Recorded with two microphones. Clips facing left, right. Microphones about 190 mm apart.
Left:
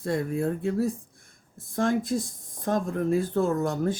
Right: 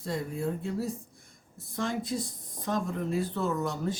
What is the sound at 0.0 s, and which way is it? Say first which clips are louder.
Speech: left 6 dB; 55° left (ahead or behind).